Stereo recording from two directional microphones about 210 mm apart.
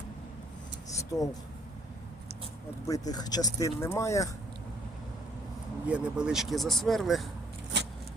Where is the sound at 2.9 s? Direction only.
15° left (ahead or behind).